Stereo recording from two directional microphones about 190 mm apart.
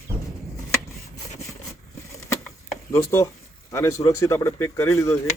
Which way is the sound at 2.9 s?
15° left (ahead or behind).